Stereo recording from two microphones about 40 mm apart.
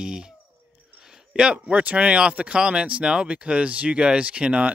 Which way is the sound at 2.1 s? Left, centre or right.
Right.